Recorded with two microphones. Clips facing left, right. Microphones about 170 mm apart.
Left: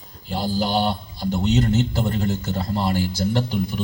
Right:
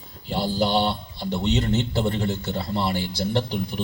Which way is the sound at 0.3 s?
40° left (ahead or behind).